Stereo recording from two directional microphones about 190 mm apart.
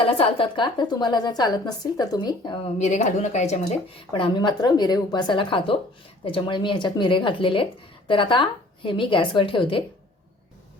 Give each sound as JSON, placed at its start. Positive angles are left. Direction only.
{"t": 0.0, "sound": "speech", "side_deg": 30}
{"t": 2.7, "sound": "speech", "side_deg": 40}